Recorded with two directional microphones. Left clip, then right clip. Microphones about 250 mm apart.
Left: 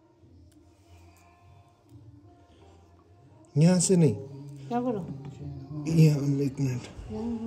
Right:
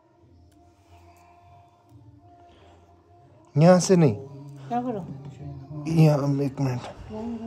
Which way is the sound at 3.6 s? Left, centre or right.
Centre.